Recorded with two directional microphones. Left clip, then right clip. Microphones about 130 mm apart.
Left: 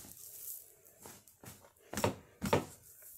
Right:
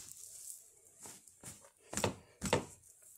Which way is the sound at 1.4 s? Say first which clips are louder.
Even; 80° right.